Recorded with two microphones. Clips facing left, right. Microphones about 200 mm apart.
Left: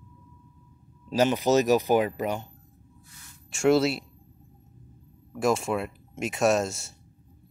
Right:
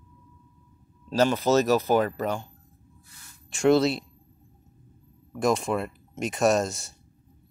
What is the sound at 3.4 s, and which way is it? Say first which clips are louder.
Speech: right 1 dB; 5° left (ahead or behind).